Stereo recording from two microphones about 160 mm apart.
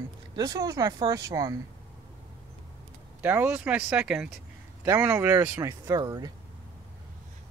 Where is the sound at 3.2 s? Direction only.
15° right (ahead or behind).